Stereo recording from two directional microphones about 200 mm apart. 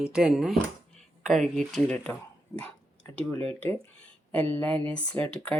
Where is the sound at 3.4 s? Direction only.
30° right (ahead or behind).